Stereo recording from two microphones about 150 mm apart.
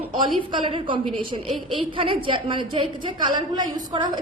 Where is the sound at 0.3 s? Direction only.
35° right (ahead or behind).